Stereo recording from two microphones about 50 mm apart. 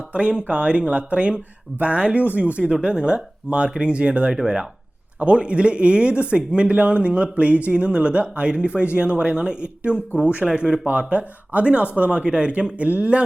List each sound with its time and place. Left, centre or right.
0.1 s speech: right